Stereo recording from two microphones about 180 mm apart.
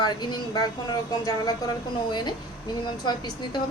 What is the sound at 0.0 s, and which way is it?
Speech, 25° left (ahead or behind).